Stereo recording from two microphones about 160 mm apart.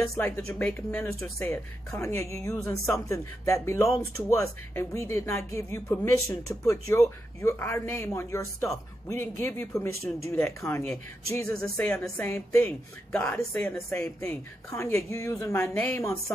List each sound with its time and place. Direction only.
0.1 s speech: 10° left (ahead or behind)
11.5 s speech: 5° left (ahead or behind)
14.2 s speech: 15° left (ahead or behind)